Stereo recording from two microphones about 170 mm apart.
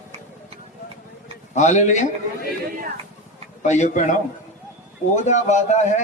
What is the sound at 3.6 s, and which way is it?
Speech, 45° left (ahead or behind).